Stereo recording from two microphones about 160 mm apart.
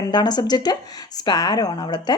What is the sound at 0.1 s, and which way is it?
Speech, 25° left (ahead or behind).